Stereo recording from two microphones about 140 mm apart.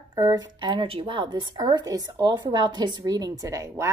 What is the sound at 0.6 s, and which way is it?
A woman's voice, 35° right (ahead or behind).